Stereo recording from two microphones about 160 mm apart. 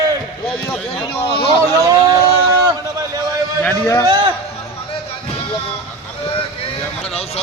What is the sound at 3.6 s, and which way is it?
Speech, 15° left (ahead or behind).